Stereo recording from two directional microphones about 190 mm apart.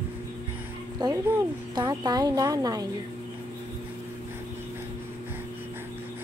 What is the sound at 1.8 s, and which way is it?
Speech, 20° right (ahead or behind).